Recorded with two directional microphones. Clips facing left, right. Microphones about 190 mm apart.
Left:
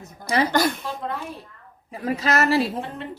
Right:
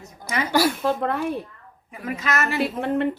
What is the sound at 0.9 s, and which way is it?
Speech, 60° right (ahead or behind).